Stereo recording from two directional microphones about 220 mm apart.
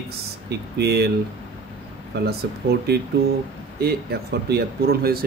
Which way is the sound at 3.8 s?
45° right (ahead or behind).